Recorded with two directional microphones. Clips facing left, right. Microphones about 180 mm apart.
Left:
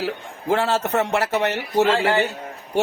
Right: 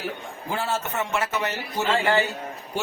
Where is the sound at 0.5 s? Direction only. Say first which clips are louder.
Left 7 dB; 75° left (ahead or behind).